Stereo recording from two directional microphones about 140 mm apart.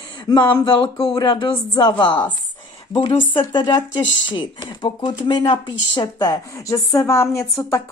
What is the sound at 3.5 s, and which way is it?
A woman's voice, 30° left (ahead or behind).